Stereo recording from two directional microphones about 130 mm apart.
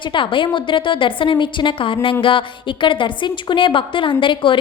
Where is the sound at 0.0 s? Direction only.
40° left (ahead or behind).